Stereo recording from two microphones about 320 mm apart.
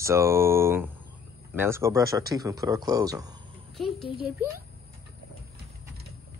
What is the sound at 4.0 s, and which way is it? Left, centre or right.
Speech, centre.